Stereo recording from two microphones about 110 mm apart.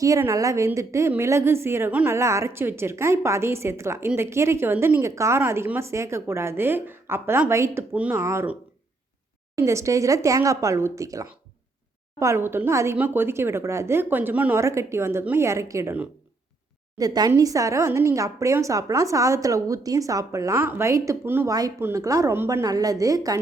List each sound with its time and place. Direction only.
0.2 s a woman's voice: 30° right (ahead or behind)
9.6 s a woman's voice: 25° right (ahead or behind)
17.0 s a woman's voice: 35° right (ahead or behind)